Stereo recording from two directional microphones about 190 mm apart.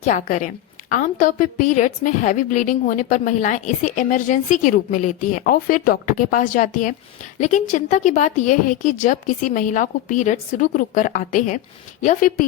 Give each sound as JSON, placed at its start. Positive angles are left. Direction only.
{"t": 0.0, "sound": "a woman's voice", "side_deg": 40}